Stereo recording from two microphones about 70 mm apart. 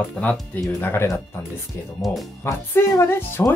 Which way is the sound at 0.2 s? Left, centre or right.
Left.